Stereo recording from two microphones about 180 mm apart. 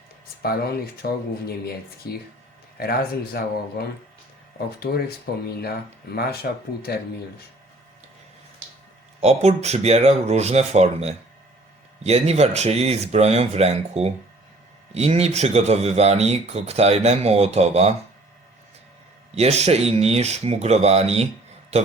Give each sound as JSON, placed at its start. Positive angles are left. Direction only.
{"t": 1.0, "sound": "speech", "side_deg": 60}
{"t": 9.2, "sound": "speech", "side_deg": -35}
{"t": 19.3, "sound": "speech", "side_deg": -35}